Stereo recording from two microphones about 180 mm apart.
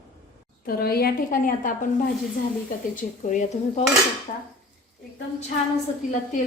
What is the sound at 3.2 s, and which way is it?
Speech, 45° left (ahead or behind).